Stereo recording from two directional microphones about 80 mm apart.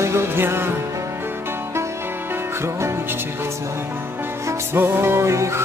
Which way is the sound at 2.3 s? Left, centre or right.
Right.